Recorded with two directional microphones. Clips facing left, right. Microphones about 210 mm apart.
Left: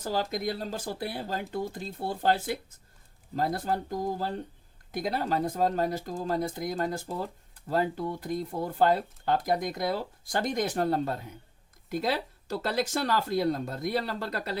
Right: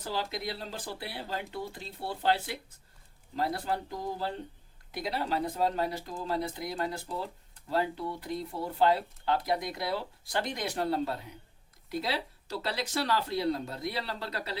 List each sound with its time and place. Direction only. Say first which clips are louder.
0.0 s speech: left 5 dB; 45° left (ahead or behind)